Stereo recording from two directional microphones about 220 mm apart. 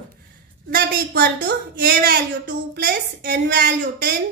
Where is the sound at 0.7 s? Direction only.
40° right (ahead or behind).